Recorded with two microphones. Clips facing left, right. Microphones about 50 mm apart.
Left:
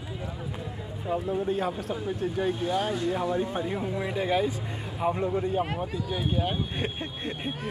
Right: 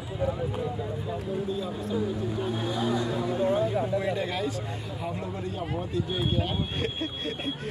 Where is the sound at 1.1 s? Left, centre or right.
Left.